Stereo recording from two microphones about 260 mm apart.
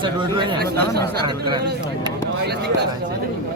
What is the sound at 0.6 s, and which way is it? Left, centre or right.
Speech, right.